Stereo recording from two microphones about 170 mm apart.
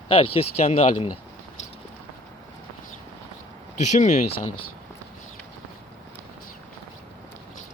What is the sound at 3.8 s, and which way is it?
Speech, 45° left (ahead or behind).